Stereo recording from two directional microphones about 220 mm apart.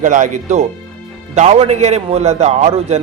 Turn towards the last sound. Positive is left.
turn(degrees=-30)  # may be behind; listen again after turning